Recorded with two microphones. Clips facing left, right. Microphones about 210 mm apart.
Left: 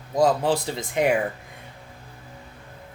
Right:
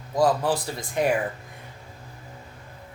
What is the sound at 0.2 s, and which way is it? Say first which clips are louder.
Speech: left 2 dB; 25° left (ahead or behind).